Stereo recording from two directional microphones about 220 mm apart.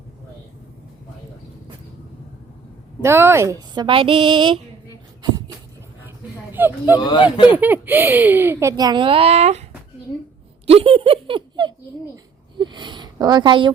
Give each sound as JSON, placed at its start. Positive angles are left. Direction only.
{"t": 3.0, "sound": "speech", "side_deg": -10}
{"t": 6.5, "sound": "speech", "side_deg": -10}
{"t": 6.9, "sound": "speech", "side_deg": 20}
{"t": 7.5, "sound": "a child's voice", "side_deg": -10}
{"t": 10.7, "sound": "a woman's voice", "side_deg": -25}